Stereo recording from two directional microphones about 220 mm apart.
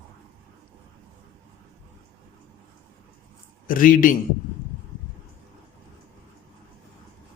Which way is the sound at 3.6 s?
40° left (ahead or behind).